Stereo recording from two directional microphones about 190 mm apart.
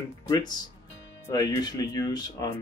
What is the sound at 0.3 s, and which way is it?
Speech, 20° left (ahead or behind).